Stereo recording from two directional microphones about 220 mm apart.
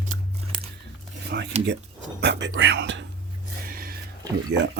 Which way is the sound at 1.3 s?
45° right (ahead or behind).